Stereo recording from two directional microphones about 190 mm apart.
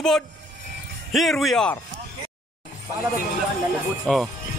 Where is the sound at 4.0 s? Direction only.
Centre (ahead or behind).